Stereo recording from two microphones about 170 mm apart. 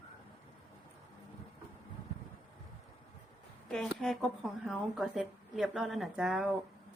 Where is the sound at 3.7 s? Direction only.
Centre (ahead or behind).